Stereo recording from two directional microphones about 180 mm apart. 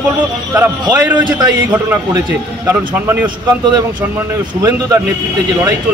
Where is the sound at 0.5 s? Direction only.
10° right (ahead or behind).